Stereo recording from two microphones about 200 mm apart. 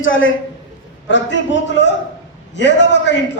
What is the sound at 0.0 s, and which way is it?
Speech, 75° left (ahead or behind).